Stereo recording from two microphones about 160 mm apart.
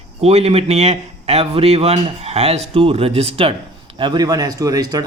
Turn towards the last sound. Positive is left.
turn(degrees=-25)  # may be behind; listen again after turning